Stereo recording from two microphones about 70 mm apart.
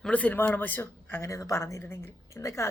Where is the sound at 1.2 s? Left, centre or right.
Left.